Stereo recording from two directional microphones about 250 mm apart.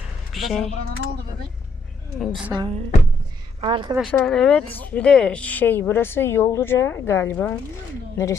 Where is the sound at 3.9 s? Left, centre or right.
Centre.